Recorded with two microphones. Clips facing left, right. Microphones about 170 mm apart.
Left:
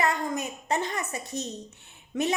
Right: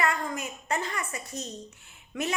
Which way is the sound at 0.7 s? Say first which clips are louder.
Left 2 dB; 25° left (ahead or behind).